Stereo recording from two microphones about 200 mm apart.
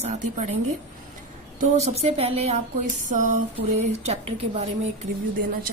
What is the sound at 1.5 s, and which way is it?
A woman's voice, 35° right (ahead or behind).